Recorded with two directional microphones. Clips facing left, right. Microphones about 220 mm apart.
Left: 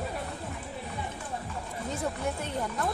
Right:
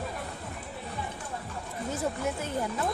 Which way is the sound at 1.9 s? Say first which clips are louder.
Right 1 dB; 5° right (ahead or behind).